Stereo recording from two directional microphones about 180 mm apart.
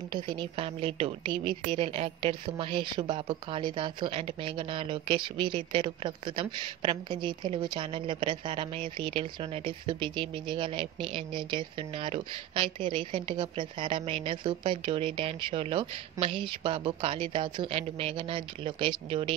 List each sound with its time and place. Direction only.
0.1 s a woman's voice: 25° right (ahead or behind)